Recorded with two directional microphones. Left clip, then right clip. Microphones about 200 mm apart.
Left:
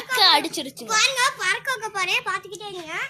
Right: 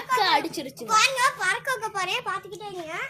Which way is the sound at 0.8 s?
50° right (ahead or behind).